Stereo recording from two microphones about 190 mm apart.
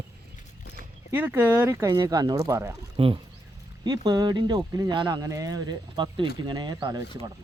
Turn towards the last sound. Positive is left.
turn(degrees=-20)  # may be behind; listen again after turning